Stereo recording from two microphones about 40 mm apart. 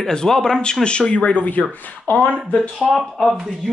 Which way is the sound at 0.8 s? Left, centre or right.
Left.